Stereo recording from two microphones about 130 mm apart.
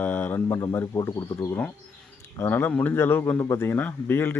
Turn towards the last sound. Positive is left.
turn(degrees=15)  # may be behind; listen again after turning